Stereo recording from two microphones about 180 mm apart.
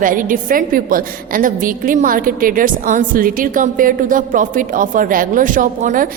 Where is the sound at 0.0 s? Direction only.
50° right (ahead or behind).